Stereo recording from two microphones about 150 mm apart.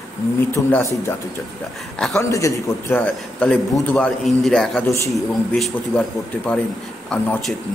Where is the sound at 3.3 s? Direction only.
10° left (ahead or behind).